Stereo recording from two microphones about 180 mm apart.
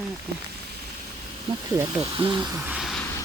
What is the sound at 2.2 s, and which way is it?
Speech, 25° right (ahead or behind).